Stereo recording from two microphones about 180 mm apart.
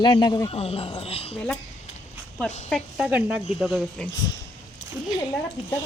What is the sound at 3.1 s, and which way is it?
Speech, 10° right (ahead or behind).